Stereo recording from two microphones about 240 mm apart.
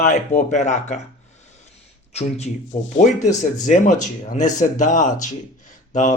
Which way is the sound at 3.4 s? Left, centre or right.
Left.